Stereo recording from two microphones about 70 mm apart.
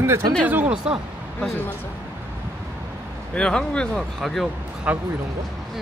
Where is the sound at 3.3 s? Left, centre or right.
Centre.